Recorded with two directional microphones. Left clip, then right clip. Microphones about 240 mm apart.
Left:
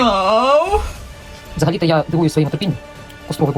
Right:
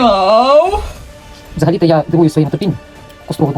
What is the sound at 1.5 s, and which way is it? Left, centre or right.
Speech, left.